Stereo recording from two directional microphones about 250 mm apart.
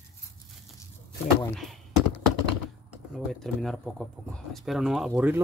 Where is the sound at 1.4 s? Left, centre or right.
Centre.